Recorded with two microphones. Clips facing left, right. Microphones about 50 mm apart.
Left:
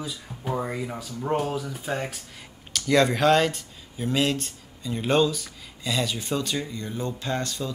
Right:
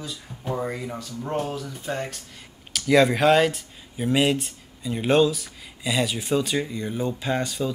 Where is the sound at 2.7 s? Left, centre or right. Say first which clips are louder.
Right 3 dB; centre.